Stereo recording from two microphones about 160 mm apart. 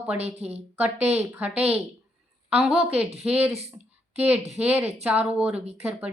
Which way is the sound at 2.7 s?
40° right (ahead or behind).